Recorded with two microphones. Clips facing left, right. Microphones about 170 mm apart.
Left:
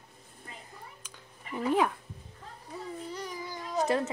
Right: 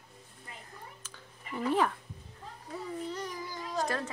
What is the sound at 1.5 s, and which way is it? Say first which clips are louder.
Speech: left 2 dB; 10° left (ahead or behind).